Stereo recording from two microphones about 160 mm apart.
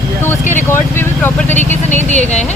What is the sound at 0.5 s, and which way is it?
Speech, 15° left (ahead or behind).